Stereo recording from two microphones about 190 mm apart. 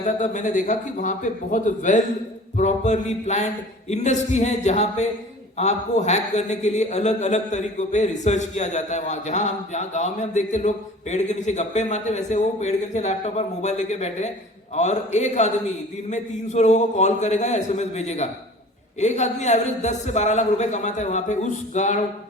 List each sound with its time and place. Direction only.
0.0 s a man's voice: 40° left (ahead or behind)